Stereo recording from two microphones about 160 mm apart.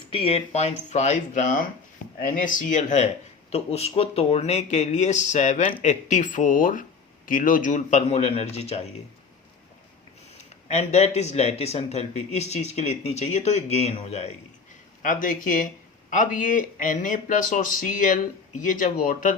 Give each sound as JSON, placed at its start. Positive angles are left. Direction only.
{"t": 0.1, "sound": "speech", "side_deg": 35}
{"t": 10.3, "sound": "speech", "side_deg": 45}
{"t": 15.0, "sound": "speech", "side_deg": 55}